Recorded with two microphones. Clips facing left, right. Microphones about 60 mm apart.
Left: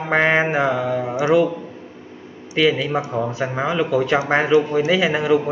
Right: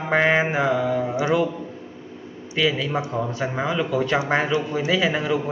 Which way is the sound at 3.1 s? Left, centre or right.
Centre.